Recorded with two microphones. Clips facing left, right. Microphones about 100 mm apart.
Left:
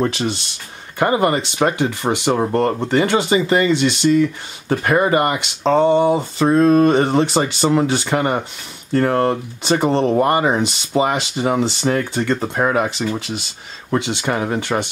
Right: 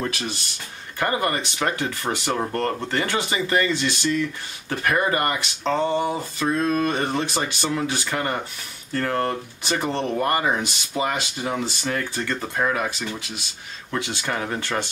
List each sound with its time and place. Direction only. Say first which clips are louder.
0.0 s speech: left 8 dB; 25° left (ahead or behind)
11.4 s speech: left 9 dB; 70° left (ahead or behind)
11.8 s speech: left 8 dB; 20° left (ahead or behind)
12.6 s speech: left 4 dB; 35° left (ahead or behind)
14.2 s speech: left 6 dB; 15° left (ahead or behind)